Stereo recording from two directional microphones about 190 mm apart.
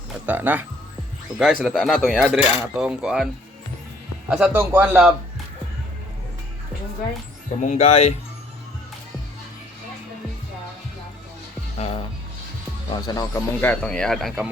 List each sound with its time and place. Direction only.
0.3 s a man's voice: 10° right (ahead or behind)
1.6 s cutlery: centre (ahead or behind)
4.3 s a man's voice: 5° right (ahead or behind)
7.6 s speech: 40° left (ahead or behind)
11.8 s music: 35° left (ahead or behind)
12.9 s cutlery: 20° left (ahead or behind); by 14.5 s centre (ahead or behind)